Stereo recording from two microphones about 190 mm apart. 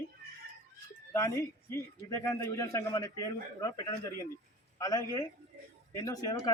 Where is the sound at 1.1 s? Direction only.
15° left (ahead or behind).